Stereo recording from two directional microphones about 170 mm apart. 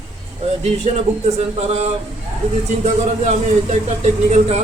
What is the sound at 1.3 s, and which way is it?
A man's voice, 40° right (ahead or behind).